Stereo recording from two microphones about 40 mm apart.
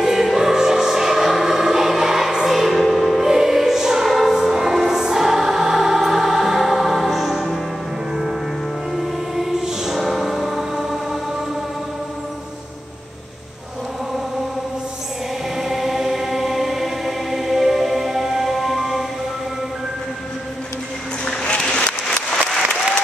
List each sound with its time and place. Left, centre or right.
0.0 s choir: centre
2.4 s music: centre
9.3 s music: centre
15.5 s choir: centre
21.7 s a sound: left